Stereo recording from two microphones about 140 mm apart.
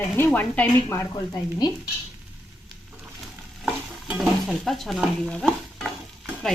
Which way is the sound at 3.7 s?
Centre (ahead or behind).